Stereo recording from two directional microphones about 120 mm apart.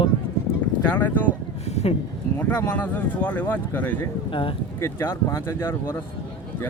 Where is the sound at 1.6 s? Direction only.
65° left (ahead or behind).